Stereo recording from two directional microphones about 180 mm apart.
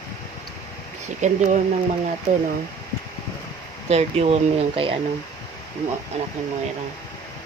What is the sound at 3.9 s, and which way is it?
Speech, 35° right (ahead or behind).